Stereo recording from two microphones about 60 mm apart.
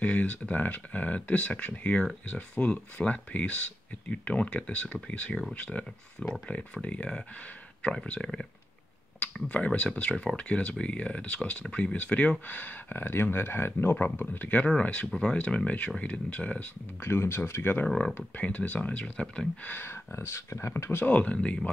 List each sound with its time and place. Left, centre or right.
0.0 s speech: left
14.8 s speech: centre
17.0 s speech: left
17.8 s speech: centre
18.1 s speech: left
19.7 s speech: left
21.1 s speech: left